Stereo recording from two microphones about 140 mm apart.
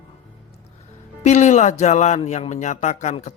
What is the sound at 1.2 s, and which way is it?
A man's voice, 60° left (ahead or behind).